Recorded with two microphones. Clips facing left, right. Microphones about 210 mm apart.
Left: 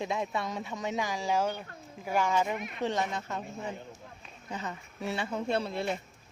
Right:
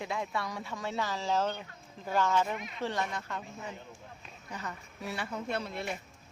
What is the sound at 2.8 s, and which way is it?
Speech, 20° left (ahead or behind).